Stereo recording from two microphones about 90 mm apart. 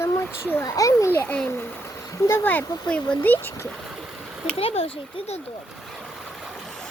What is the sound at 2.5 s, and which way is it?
Speech, 15° left (ahead or behind).